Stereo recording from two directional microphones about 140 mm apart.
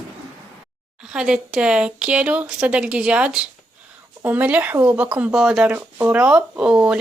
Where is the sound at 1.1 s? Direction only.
5° right (ahead or behind).